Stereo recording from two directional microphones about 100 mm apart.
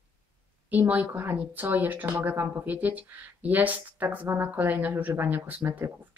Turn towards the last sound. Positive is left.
turn(degrees=-20)  # may be behind; listen again after turning